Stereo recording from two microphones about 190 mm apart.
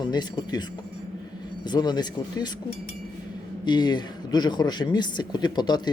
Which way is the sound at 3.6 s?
20° left (ahead or behind).